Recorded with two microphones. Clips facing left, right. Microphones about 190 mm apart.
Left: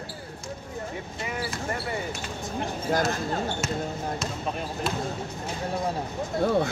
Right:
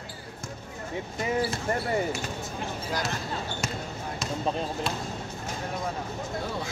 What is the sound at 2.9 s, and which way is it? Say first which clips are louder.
Speech: left 7 dB; 50° left (ahead or behind).